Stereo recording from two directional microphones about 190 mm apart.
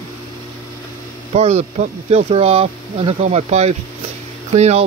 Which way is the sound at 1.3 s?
35° right (ahead or behind).